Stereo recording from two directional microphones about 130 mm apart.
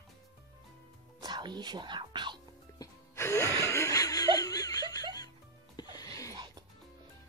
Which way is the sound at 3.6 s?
20° left (ahead or behind).